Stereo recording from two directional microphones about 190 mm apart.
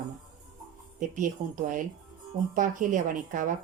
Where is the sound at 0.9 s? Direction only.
40° right (ahead or behind).